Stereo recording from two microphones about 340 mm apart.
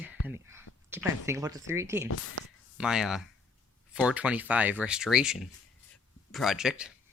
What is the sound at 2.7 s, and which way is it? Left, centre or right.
Speech, centre.